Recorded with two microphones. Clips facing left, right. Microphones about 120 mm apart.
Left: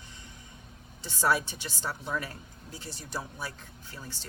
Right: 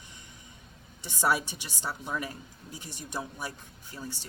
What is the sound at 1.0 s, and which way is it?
Speech, 15° right (ahead or behind).